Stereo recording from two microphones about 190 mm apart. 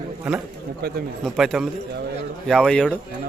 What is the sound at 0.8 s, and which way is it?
Speech, 55° right (ahead or behind).